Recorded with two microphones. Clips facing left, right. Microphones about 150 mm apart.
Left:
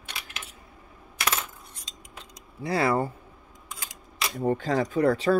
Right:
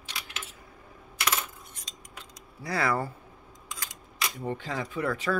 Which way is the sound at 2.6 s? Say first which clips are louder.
Left 4 dB; 25° left (ahead or behind).